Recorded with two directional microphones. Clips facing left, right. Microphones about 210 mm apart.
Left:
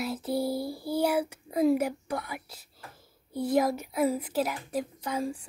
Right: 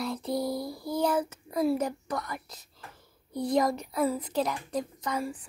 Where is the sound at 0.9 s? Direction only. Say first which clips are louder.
Left 1 dB; 10° left (ahead or behind).